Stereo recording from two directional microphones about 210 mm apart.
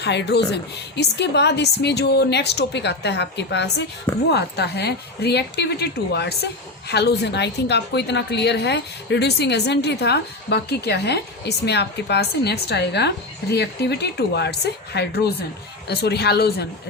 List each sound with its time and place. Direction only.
0.0 s a woman's voice: 55° left (ahead or behind)